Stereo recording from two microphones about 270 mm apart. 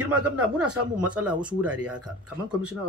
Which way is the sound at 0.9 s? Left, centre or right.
Centre.